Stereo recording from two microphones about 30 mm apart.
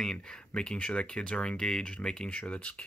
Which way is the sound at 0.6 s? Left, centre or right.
Left.